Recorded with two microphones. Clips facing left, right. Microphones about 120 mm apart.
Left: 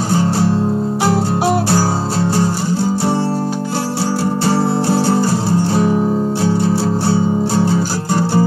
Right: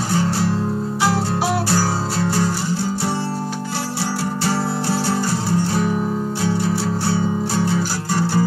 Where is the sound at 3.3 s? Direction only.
35° left (ahead or behind).